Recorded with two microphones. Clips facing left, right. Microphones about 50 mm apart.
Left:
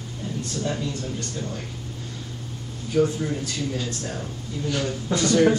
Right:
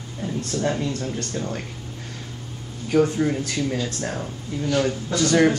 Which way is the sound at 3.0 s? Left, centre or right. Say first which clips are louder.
Right 2 dB; right.